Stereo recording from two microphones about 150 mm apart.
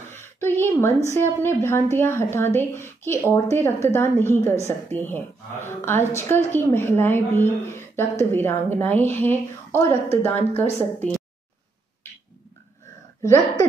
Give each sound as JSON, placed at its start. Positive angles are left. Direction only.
{"t": 0.1, "sound": "a sound", "side_deg": 15}
{"t": 1.1, "sound": "a woman's voice", "side_deg": 15}
{"t": 13.2, "sound": "speech", "side_deg": 20}